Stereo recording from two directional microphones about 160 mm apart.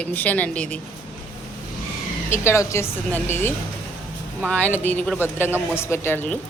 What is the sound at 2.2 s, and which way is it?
A woman's voice, 15° left (ahead or behind).